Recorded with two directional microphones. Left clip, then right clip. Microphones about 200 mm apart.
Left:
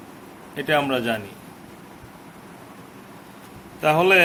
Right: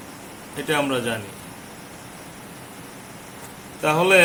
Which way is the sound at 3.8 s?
30° left (ahead or behind).